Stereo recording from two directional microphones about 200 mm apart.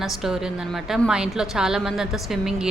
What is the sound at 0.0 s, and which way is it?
A woman's voice, centre (ahead or behind).